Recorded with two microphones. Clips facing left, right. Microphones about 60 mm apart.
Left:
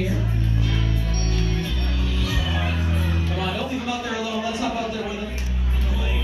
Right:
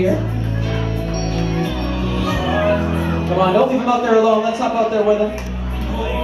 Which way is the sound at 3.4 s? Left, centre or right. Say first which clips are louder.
Right 15 dB; right.